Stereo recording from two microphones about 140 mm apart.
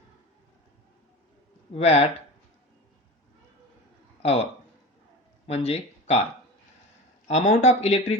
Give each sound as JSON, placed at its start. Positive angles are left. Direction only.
{"t": 1.7, "sound": "speech", "side_deg": 45}
{"t": 4.2, "sound": "speech", "side_deg": 45}
{"t": 5.5, "sound": "speech", "side_deg": 45}
{"t": 7.3, "sound": "speech", "side_deg": 55}